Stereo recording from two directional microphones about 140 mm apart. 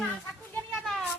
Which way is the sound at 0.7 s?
Centre (ahead or behind).